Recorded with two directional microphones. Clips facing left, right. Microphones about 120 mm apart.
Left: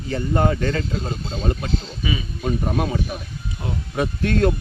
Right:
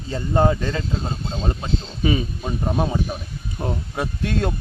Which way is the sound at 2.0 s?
45° right (ahead or behind).